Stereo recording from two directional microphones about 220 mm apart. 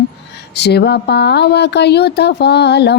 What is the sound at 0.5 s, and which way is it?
Speech, 50° left (ahead or behind).